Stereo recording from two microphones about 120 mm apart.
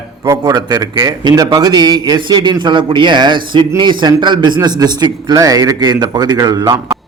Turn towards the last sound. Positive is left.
turn(degrees=-30)  # may be behind; listen again after turning